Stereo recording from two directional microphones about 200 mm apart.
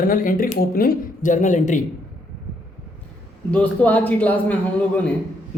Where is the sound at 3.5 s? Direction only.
5° left (ahead or behind).